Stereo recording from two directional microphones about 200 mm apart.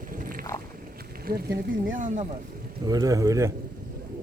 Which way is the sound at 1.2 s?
50° right (ahead or behind).